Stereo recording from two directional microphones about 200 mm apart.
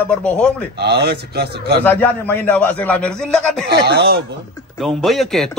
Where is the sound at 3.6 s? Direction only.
55° right (ahead or behind).